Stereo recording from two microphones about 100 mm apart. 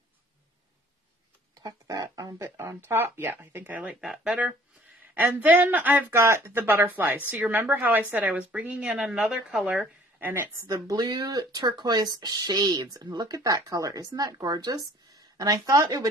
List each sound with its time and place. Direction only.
1.5 s speech: 40° right (ahead or behind); by 9.8 s 5° right (ahead or behind)
10.2 s speech: 20° right (ahead or behind)
10.7 s speech: 40° right (ahead or behind)